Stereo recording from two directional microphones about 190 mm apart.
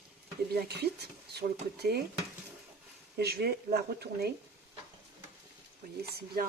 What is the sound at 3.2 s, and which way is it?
Speech, 60° right (ahead or behind).